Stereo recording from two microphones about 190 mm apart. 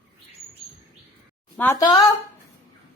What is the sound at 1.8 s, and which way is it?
Speech, 20° left (ahead or behind).